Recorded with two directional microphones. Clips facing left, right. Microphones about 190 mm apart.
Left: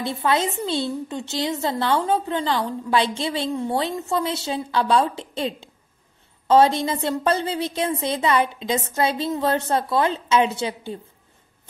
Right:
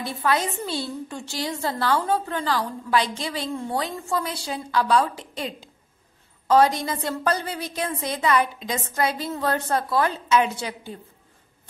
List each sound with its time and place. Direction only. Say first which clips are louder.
0.0 s a woman's voice: left 2 dB; 25° left (ahead or behind)